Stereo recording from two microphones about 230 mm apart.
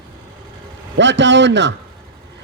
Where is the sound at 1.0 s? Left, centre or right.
Right.